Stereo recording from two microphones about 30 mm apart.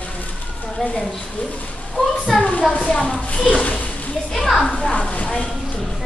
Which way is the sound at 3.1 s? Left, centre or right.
Left.